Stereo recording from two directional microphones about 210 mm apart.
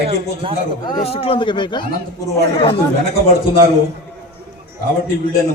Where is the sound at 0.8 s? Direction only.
25° left (ahead or behind).